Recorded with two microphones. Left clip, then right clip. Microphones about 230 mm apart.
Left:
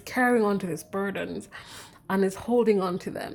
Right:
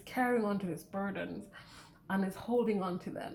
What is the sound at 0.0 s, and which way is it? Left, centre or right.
Speech, left.